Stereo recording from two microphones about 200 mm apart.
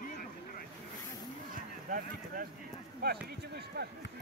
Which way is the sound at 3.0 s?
55° right (ahead or behind).